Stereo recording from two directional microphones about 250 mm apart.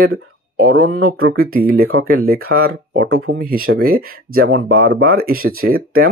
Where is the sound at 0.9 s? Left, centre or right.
Right.